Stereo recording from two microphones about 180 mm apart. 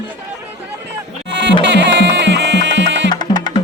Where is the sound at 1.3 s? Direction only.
75° right (ahead or behind).